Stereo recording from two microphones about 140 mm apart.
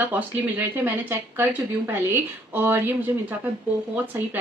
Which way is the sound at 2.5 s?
15° right (ahead or behind).